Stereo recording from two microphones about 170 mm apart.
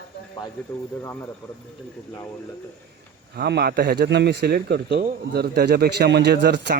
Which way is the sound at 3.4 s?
70° right (ahead or behind).